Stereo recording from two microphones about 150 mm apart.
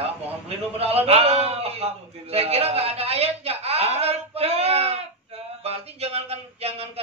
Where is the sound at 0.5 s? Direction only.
40° right (ahead or behind).